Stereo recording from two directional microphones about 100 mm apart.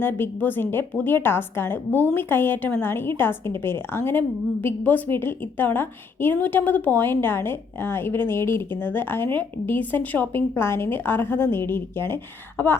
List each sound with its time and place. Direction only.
0.0 s a woman's voice: 20° left (ahead or behind)